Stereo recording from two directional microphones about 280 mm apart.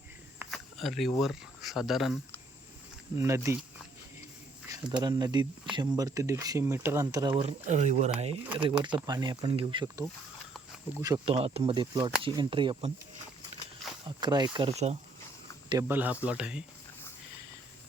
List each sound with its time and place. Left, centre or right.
0.3 s speech: centre
4.7 s speech: centre
14.2 s speech: centre
15.7 s speech: centre